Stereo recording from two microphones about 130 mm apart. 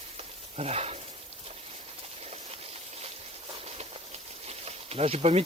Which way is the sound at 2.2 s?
55° right (ahead or behind).